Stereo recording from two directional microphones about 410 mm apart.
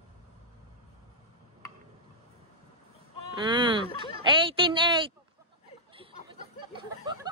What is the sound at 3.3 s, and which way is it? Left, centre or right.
Speech, centre.